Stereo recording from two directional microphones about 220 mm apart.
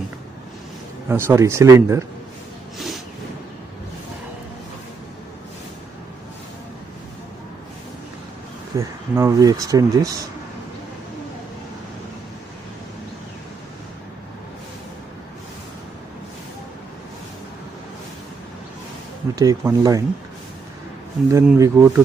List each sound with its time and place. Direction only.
1.0 s speech: 10° right (ahead or behind)
8.7 s speech: 15° right (ahead or behind)
19.3 s speech: 15° right (ahead or behind)
21.3 s speech: 15° right (ahead or behind)